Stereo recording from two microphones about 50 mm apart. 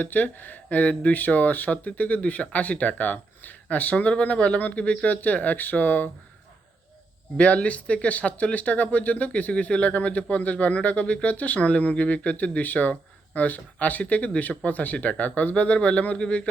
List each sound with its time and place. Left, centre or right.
0.0 s speech: left
7.3 s speech: left